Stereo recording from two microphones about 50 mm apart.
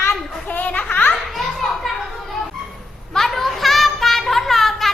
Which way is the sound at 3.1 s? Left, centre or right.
Centre.